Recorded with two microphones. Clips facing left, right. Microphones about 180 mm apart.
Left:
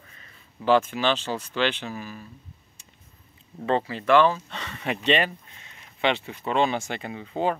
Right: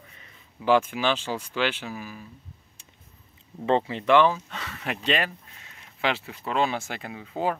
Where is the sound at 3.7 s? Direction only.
20° right (ahead or behind).